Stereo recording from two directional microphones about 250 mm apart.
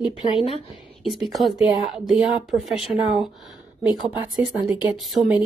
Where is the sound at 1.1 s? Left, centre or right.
Centre.